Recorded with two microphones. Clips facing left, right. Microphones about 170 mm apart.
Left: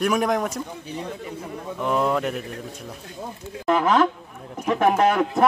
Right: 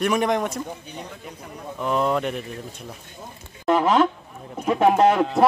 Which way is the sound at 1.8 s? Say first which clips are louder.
Even; centre (ahead or behind).